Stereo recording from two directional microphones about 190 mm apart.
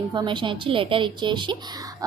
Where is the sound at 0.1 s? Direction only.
25° right (ahead or behind).